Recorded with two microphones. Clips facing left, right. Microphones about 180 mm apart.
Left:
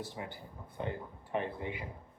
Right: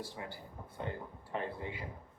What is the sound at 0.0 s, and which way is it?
Speech, 20° left (ahead or behind).